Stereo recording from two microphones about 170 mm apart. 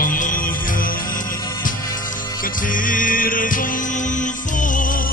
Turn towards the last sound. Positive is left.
turn(degrees=50)  # may be behind; listen again after turning